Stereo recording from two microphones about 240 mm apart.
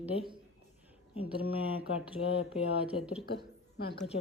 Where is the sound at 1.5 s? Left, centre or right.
Centre.